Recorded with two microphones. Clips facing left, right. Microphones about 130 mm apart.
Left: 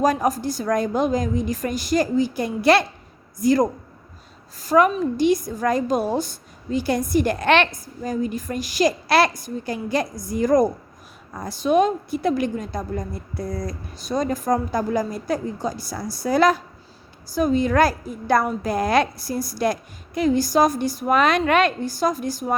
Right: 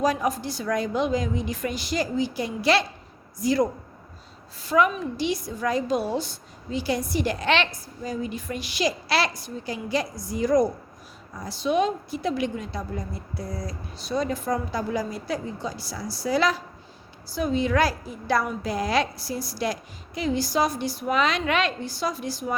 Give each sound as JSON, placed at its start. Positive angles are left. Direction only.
{"t": 0.0, "sound": "a woman's voice", "side_deg": 45}